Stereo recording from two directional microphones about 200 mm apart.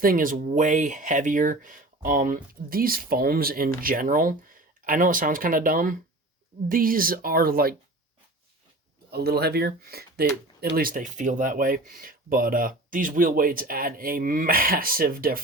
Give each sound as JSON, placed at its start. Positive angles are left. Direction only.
{"t": 0.0, "sound": "speech", "side_deg": -45}
{"t": 9.0, "sound": "speech", "side_deg": -55}